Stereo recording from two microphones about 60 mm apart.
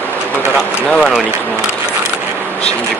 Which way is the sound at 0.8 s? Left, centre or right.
Centre.